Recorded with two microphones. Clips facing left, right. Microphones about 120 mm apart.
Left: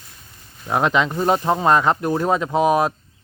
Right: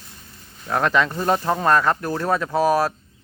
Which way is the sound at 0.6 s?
15° left (ahead or behind).